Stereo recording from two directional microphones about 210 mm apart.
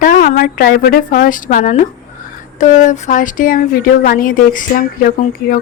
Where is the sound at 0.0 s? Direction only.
40° left (ahead or behind).